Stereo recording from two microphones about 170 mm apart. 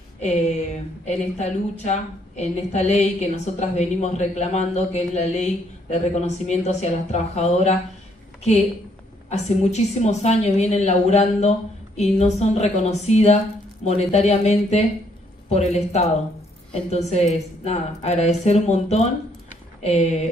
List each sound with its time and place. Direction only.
1.0 s a woman's voice: 40° left (ahead or behind)
9.3 s a woman's voice: 40° left (ahead or behind)